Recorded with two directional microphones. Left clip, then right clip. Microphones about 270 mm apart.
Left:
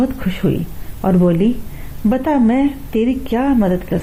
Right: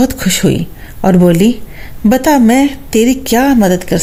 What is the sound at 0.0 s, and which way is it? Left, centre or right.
A woman's voice, right.